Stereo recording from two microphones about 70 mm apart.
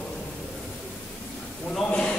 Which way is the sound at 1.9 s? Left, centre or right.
Centre.